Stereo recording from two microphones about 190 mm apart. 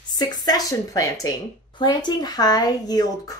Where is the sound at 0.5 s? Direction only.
15° left (ahead or behind).